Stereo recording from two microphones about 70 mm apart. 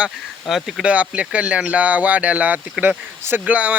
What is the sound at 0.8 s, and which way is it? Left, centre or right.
Speech, centre.